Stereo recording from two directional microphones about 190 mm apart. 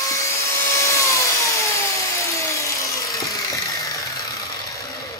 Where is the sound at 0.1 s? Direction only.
15° left (ahead or behind).